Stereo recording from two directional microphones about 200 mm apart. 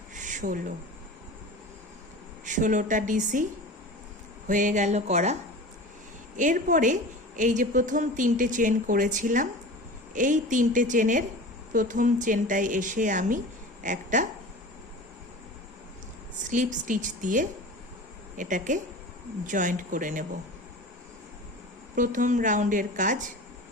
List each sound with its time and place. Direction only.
0.1 s a sound: 40° right (ahead or behind)
2.4 s a woman's voice: 40° right (ahead or behind)
4.4 s a woman's voice: 40° right (ahead or behind)
16.4 s a woman's voice: 40° right (ahead or behind)
21.9 s a woman's voice: 40° right (ahead or behind)